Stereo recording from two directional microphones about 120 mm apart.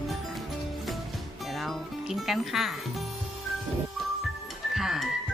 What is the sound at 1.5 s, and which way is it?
Music, centre (ahead or behind).